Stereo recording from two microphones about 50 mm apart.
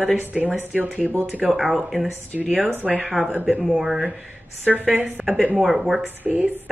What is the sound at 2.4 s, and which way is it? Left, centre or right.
Speech, right.